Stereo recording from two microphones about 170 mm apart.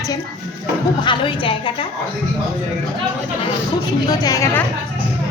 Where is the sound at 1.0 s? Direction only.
30° left (ahead or behind).